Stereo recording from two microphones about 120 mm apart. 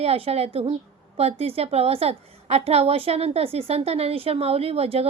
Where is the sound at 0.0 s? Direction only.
60° right (ahead or behind).